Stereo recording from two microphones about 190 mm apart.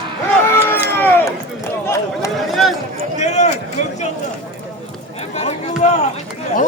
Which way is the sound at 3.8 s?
40° left (ahead or behind).